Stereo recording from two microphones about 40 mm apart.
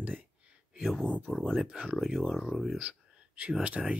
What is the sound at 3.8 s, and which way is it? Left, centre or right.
Speech, centre.